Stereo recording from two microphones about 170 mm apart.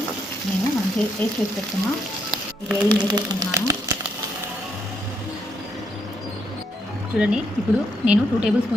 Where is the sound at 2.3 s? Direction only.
10° right (ahead or behind).